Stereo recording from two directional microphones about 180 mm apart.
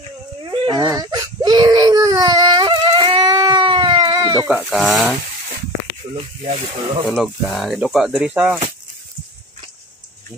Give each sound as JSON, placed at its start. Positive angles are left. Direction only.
{"t": 0.5, "sound": "baby cry", "side_deg": -25}
{"t": 4.5, "sound": "speech", "side_deg": -5}
{"t": 6.1, "sound": "speech", "side_deg": -35}
{"t": 7.1, "sound": "speech", "side_deg": 5}